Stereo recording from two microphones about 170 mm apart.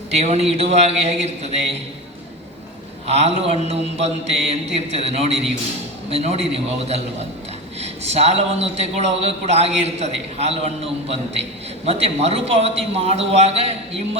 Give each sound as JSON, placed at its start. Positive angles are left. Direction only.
{"t": 0.1, "sound": "a man's voice", "side_deg": -40}
{"t": 3.1, "sound": "a man's voice", "side_deg": -35}